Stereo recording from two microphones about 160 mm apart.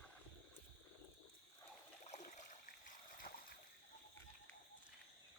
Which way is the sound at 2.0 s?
50° left (ahead or behind).